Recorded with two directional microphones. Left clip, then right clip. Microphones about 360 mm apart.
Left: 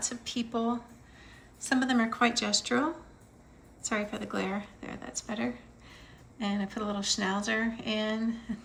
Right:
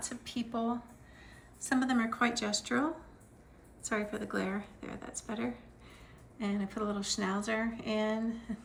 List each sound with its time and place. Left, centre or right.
0.1 s speech: centre